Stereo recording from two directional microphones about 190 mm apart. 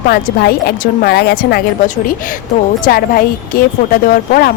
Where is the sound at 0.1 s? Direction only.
55° left (ahead or behind).